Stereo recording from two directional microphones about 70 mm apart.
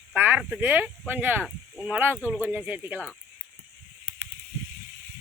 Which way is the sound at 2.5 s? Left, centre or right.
Right.